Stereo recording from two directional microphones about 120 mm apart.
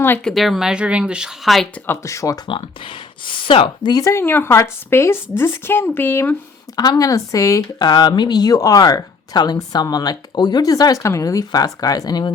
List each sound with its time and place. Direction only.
0.3 s speech: centre (ahead or behind)
1.7 s a woman's voice: 25° left (ahead or behind)
2.5 s speech: 45° left (ahead or behind)
3.9 s a woman's voice: 25° left (ahead or behind)
6.7 s a woman's voice: 30° left (ahead or behind)